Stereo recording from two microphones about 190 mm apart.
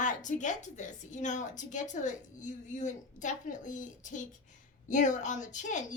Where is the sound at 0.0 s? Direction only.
40° left (ahead or behind).